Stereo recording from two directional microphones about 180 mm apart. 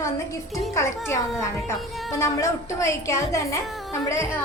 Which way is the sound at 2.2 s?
15° left (ahead or behind).